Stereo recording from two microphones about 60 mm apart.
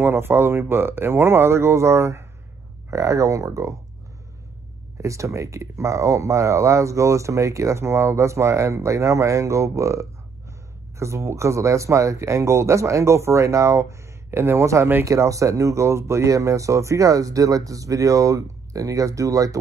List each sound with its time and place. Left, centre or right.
0.0 s speech: right
2.9 s speech: right
4.9 s speech: right
15.0 s speech: right